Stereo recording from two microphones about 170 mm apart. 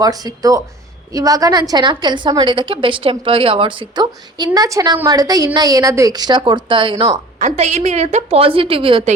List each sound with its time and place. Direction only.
0.0 s a woman's voice: 20° right (ahead or behind)
7.3 s a woman's voice: 40° right (ahead or behind)